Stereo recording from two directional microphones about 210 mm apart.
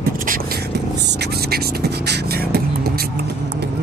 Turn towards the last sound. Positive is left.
turn(degrees=-50)  # may be behind; listen again after turning